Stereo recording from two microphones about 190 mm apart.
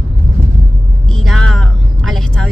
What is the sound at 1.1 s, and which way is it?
Vehicle, centre (ahead or behind).